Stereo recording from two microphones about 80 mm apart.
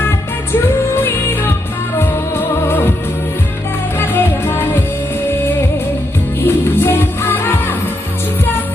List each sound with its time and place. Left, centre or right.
0.5 s music: left
3.9 s music: left
6.4 s music: left